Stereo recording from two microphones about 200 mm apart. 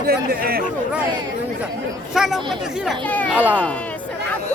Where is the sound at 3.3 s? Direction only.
10° right (ahead or behind).